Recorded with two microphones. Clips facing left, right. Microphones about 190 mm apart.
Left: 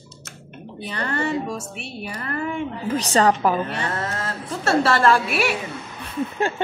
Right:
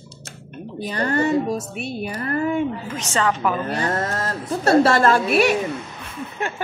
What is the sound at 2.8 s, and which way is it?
Speech, 35° left (ahead or behind).